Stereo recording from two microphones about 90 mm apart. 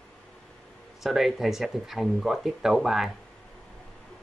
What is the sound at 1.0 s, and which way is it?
Speech, 5° right (ahead or behind).